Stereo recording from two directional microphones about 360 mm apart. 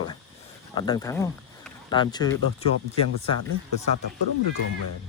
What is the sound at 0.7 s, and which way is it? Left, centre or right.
Speech, centre.